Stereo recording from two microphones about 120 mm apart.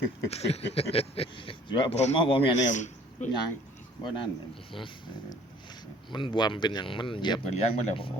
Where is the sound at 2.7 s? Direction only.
90° left.